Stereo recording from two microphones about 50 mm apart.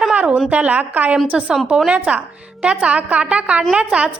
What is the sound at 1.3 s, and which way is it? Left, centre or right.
Speech, centre.